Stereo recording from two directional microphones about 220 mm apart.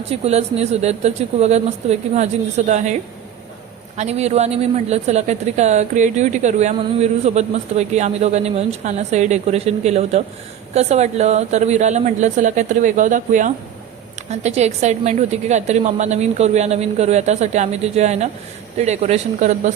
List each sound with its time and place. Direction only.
0.1 s speech: 30° right (ahead or behind)
3.9 s a woman's voice: 30° right (ahead or behind)